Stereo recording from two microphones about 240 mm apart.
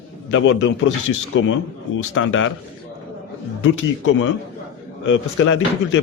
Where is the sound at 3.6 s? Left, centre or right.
Left.